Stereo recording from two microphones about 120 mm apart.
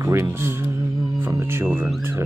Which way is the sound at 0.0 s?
25° right (ahead or behind).